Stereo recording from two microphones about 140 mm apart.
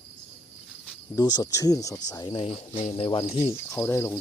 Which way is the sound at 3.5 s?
20° left (ahead or behind).